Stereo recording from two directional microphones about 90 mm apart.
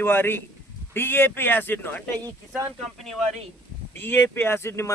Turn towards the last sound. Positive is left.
turn(degrees=30)  # may be behind; listen again after turning